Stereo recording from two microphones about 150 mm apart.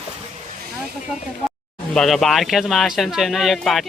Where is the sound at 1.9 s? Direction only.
Centre (ahead or behind).